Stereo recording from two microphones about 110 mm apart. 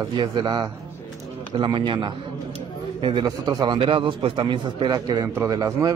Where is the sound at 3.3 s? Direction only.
35° right (ahead or behind).